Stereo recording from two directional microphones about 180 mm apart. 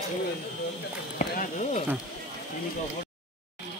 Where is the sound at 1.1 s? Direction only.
45° left (ahead or behind).